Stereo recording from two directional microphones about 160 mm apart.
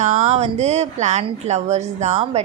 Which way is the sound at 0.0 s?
45° right (ahead or behind).